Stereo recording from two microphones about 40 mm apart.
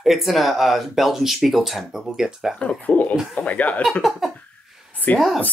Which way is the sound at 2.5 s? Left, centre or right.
Left.